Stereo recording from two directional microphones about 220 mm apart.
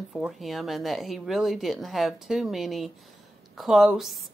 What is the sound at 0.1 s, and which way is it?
Speech, centre (ahead or behind).